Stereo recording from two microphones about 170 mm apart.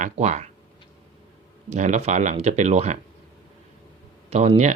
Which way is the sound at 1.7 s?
45° right (ahead or behind).